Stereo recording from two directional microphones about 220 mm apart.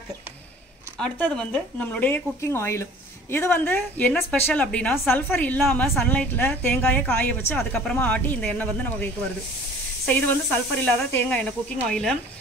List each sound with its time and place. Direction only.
0.9 s speech: 5° left (ahead or behind)